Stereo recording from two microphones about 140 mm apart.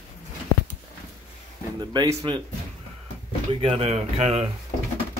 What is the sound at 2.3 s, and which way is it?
Speech, 35° right (ahead or behind).